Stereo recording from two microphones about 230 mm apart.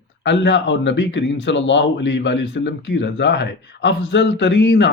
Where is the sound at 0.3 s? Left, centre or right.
Left.